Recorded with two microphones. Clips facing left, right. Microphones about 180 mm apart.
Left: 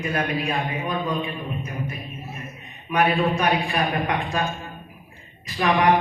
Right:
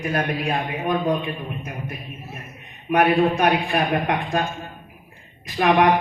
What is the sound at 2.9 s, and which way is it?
A man's voice, 55° right (ahead or behind).